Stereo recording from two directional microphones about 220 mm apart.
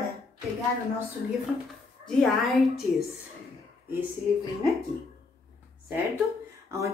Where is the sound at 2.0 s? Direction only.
5° left (ahead or behind).